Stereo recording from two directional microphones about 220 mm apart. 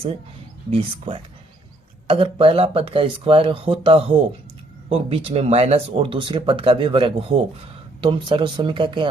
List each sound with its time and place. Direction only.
0.7 s speech: 25° right (ahead or behind)